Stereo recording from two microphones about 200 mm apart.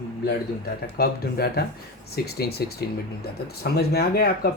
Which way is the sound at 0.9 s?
50° left (ahead or behind).